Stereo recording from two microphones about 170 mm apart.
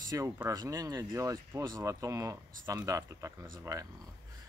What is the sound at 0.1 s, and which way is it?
Speech, 20° right (ahead or behind).